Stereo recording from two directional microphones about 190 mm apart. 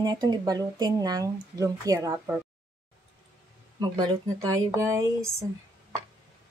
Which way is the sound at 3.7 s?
20° right (ahead or behind).